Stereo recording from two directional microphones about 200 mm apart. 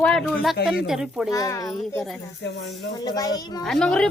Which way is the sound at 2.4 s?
60° left (ahead or behind).